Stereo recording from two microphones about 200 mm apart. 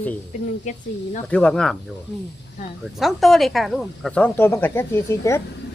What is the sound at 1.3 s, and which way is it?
Speech, 5° left (ahead or behind).